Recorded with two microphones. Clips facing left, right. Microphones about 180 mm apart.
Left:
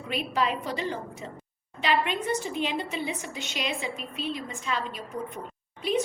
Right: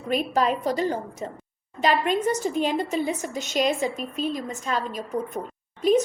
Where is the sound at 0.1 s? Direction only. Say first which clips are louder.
Right 5 dB; 45° right (ahead or behind).